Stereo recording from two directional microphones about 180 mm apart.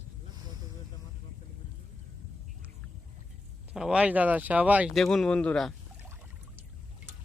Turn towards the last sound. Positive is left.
turn(degrees=5)  # may be behind; listen again after turning